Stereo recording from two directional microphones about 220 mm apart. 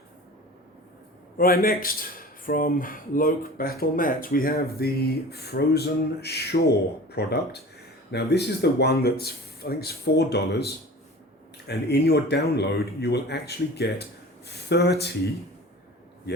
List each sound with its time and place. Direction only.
1.4 s speech: 40° left (ahead or behind)
11.7 s speech: 50° left (ahead or behind)